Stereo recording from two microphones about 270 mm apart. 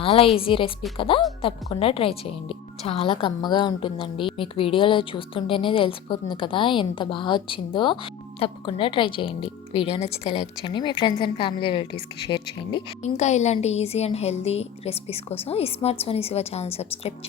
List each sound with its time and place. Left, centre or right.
0.0 s a woman's voice: left